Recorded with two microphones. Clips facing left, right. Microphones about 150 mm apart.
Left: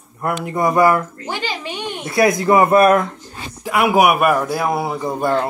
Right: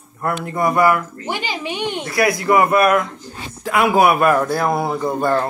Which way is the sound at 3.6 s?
10° left (ahead or behind).